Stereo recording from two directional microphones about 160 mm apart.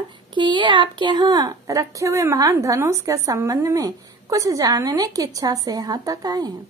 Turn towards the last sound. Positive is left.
turn(degrees=-25)  # may be behind; listen again after turning